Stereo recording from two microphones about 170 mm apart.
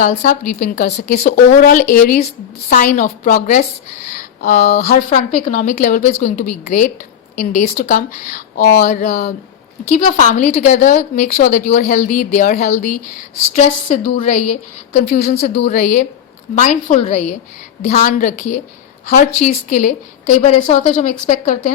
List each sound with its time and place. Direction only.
0.0 s a woman's voice: 50° left (ahead or behind)
9.9 s a woman's voice: 40° left (ahead or behind)